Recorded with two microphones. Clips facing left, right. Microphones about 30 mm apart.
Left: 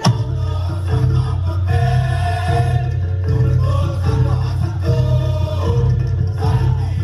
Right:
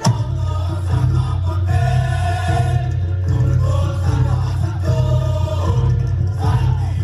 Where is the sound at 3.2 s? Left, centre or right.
Left.